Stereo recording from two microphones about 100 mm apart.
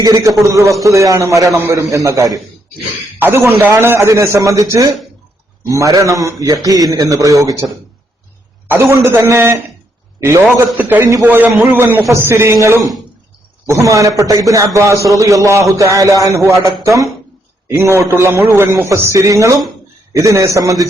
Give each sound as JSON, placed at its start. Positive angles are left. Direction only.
{"t": 0.0, "sound": "a man's voice", "side_deg": -35}
{"t": 3.2, "sound": "a man's voice", "side_deg": -25}
{"t": 8.7, "sound": "a man's voice", "side_deg": -25}
{"t": 10.8, "sound": "a man's voice", "side_deg": -15}
{"t": 11.0, "sound": "a man's voice", "side_deg": -30}
{"t": 11.3, "sound": "a man's voice", "side_deg": -20}